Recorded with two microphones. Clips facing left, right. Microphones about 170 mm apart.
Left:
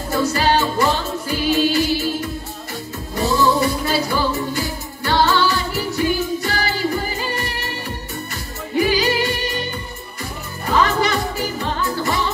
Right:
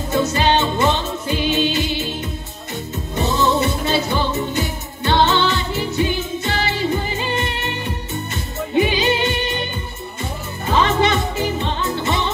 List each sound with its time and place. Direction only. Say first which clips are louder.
0.1 s music: even; 20° right (ahead or behind)
8.7 s music: even; 20° right (ahead or behind)
10.7 s music: right 1 dB; 20° right (ahead or behind)